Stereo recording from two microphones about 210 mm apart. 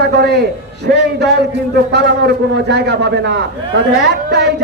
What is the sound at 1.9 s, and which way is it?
A man's voice, 55° right (ahead or behind).